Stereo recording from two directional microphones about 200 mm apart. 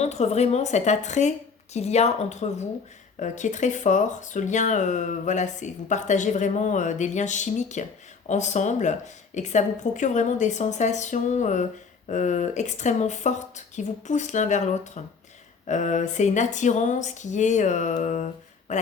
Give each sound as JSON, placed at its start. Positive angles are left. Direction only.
{"t": 0.0, "sound": "speech", "side_deg": 35}